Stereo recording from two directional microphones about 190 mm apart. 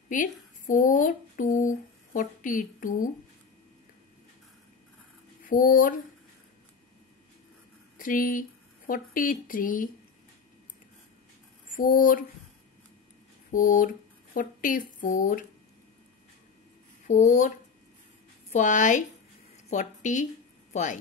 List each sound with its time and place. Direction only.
0.1 s speech: 45° left (ahead or behind)
5.4 s speech: 45° left (ahead or behind)
8.0 s speech: 45° left (ahead or behind)
11.7 s speech: 45° left (ahead or behind)
13.5 s speech: 45° left (ahead or behind)
17.1 s a woman's voice: 40° left (ahead or behind)